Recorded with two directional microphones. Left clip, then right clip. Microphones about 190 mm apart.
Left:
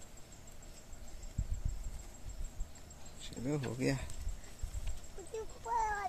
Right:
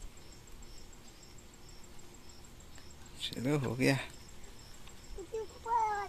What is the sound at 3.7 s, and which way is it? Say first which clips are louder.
Speech: right 6 dB; 20° right (ahead or behind).